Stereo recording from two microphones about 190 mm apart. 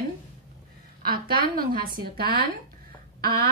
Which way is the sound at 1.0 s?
50° right (ahead or behind).